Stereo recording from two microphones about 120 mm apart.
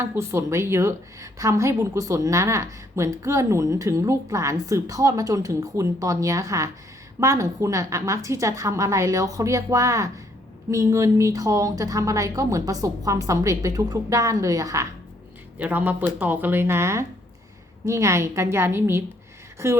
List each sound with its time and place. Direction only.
0.0 s a woman's voice: 20° right (ahead or behind)
15.5 s a woman's voice: 15° right (ahead or behind)